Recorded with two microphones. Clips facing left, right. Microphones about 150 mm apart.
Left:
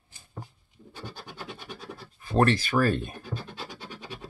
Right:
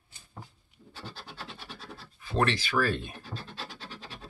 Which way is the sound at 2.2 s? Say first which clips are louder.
Left 5 dB; 45° left (ahead or behind).